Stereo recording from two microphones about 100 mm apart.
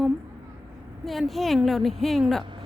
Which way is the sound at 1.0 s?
Centre (ahead or behind).